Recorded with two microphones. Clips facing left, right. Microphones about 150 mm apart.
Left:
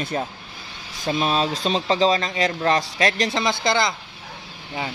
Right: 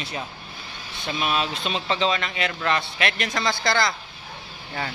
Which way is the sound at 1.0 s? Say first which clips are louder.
Left 4 dB; 35° left (ahead or behind).